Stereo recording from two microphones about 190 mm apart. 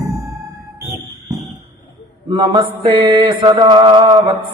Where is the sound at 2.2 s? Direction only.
25° right (ahead or behind).